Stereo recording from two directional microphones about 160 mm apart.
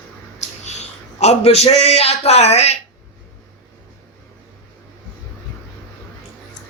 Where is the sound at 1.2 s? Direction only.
40° left (ahead or behind).